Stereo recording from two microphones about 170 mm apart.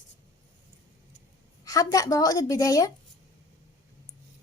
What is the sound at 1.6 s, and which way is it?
A woman's voice, 20° left (ahead or behind).